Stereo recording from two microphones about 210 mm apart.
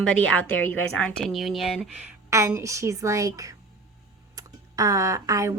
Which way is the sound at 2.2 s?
15° right (ahead or behind).